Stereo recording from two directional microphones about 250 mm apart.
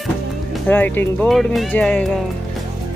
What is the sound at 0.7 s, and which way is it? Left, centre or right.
Speech, centre.